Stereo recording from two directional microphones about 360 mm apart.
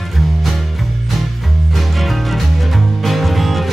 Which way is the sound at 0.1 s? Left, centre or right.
Centre.